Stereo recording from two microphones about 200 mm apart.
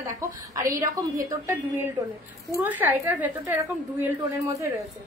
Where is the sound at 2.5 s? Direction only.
10° right (ahead or behind).